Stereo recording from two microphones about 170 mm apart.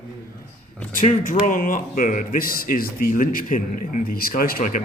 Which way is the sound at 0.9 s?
55° left (ahead or behind).